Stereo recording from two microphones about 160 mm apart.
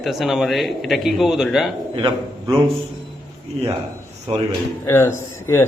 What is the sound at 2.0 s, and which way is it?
Speech, 25° right (ahead or behind).